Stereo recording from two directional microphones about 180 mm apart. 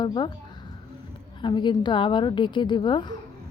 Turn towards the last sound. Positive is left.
turn(degrees=25)  # may be behind; listen again after turning